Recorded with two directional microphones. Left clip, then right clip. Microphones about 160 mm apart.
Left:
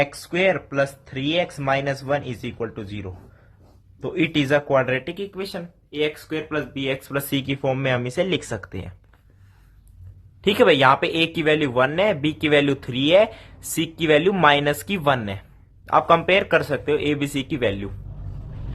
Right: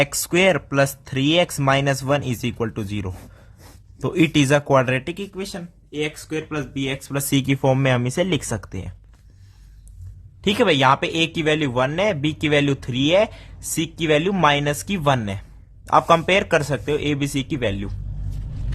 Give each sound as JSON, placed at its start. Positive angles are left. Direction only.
{"t": 0.0, "sound": "speech", "side_deg": -45}
{"t": 10.4, "sound": "speech", "side_deg": -25}